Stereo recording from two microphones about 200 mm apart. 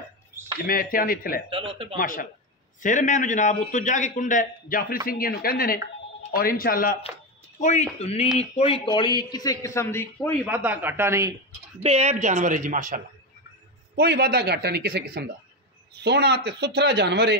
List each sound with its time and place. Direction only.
0.7 s speech: 45° left (ahead or behind)
1.5 s speech: 25° right (ahead or behind)
2.0 s a man's voice: 45° left (ahead or behind)
8.0 s a man's voice: 30° left (ahead or behind); by 10.3 s 15° left (ahead or behind)
10.4 s speech: 10° right (ahead or behind)
11.8 s a woman's voice: 35° right (ahead or behind)
13.9 s speech: 55° right (ahead or behind)